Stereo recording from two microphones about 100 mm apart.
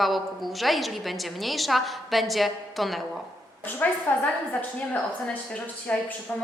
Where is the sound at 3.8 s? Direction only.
15° left (ahead or behind).